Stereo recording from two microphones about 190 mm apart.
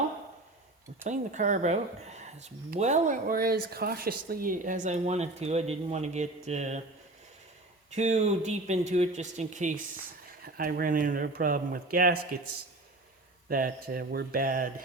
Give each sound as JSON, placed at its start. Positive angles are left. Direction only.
{"t": 1.0, "sound": "speech", "side_deg": -40}
{"t": 7.9, "sound": "speech", "side_deg": -35}
{"t": 10.4, "sound": "speech", "side_deg": -50}
{"t": 13.5, "sound": "speech", "side_deg": -50}